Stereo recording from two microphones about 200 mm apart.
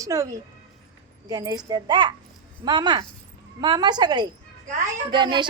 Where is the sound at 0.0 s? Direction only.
15° right (ahead or behind).